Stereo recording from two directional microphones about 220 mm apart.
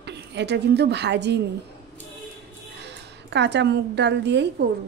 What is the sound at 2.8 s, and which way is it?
A woman's voice, 50° right (ahead or behind).